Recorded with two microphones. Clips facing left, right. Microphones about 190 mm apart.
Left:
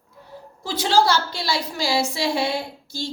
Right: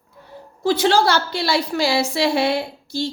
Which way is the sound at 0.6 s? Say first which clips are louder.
Right 3 dB; 60° right (ahead or behind).